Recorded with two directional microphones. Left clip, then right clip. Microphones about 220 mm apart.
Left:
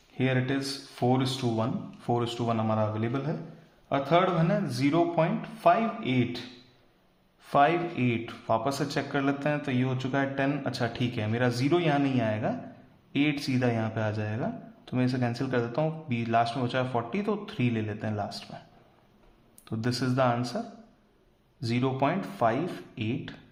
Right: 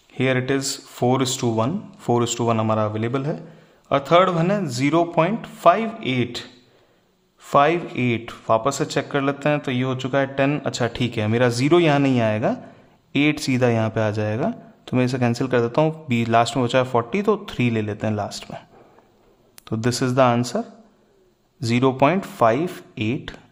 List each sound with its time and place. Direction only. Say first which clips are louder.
0.2 s speech: right 8 dB; 40° right (ahead or behind)
7.4 s speech: right 6 dB; 35° right (ahead or behind)
19.6 s speech: right 8 dB; 40° right (ahead or behind)
21.6 s speech: right 10 dB; 40° right (ahead or behind)